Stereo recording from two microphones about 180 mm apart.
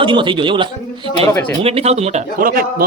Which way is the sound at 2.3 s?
55° right (ahead or behind).